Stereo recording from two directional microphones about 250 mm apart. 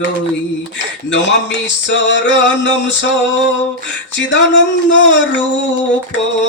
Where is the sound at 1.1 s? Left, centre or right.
Left.